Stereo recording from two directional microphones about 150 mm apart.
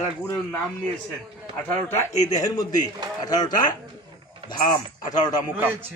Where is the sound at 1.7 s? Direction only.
15° left (ahead or behind).